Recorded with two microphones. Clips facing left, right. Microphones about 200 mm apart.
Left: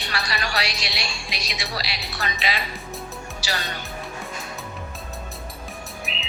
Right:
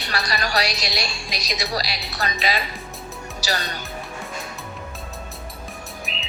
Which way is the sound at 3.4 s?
40° right (ahead or behind).